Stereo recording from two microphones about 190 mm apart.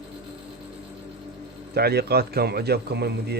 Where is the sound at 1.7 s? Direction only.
55° right (ahead or behind).